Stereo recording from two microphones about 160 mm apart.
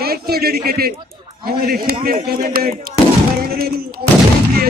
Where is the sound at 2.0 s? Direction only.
70° right (ahead or behind).